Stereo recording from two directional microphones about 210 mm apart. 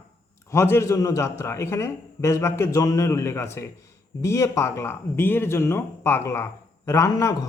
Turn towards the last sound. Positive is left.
turn(degrees=15)  # may be behind; listen again after turning